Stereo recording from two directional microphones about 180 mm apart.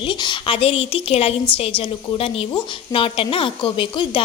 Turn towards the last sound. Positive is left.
turn(degrees=25)  # may be behind; listen again after turning